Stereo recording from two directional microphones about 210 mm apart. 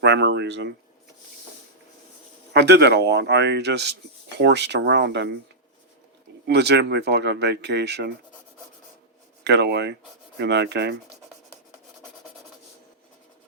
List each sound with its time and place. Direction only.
0.0 s speech: 55° right (ahead or behind)
2.5 s speech: 50° right (ahead or behind)
6.5 s speech: 55° right (ahead or behind)
9.4 s speech: 55° right (ahead or behind)